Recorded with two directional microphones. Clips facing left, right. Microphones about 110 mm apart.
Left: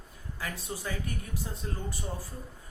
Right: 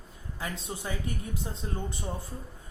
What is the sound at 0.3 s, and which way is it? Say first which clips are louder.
Speech: right 1 dB; 20° right (ahead or behind).